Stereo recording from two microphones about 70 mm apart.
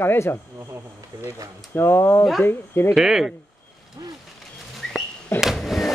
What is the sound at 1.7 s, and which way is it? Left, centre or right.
Speech, left.